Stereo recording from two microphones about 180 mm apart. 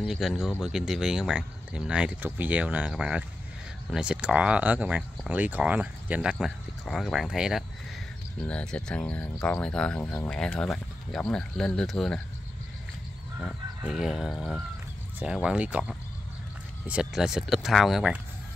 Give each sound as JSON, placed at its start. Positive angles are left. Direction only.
{"t": 0.0, "sound": "speech", "side_deg": 0}
{"t": 13.4, "sound": "speech", "side_deg": 0}